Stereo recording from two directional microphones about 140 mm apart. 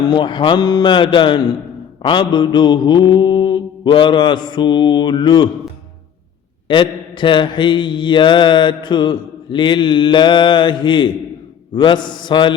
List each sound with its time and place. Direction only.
0.1 s mantra: 35° left (ahead or behind)
6.7 s mantra: 35° left (ahead or behind)